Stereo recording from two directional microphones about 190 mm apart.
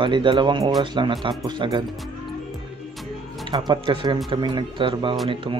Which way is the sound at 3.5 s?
25° right (ahead or behind).